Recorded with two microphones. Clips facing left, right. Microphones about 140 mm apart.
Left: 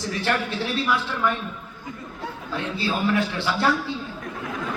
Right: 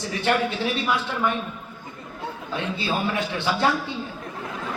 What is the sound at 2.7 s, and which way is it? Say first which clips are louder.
Speech: left 4 dB; 20° right (ahead or behind).